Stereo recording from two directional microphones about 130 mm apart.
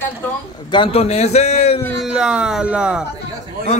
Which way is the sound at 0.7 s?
45° left (ahead or behind).